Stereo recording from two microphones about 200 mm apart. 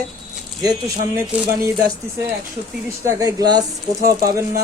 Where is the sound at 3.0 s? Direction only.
15° right (ahead or behind).